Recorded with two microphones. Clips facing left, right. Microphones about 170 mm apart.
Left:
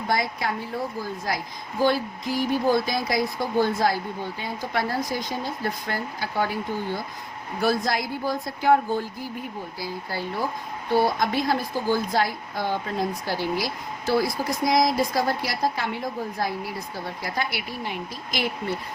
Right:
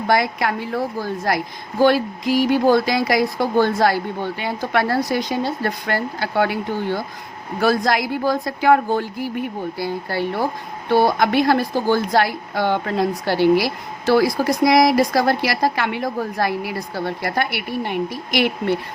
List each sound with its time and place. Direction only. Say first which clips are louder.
0.1 s a woman's voice: right 7 dB; 80° right
7.6 s a woman's voice: right 6 dB; 90° right; by 18.8 s 75° right (ahead or behind)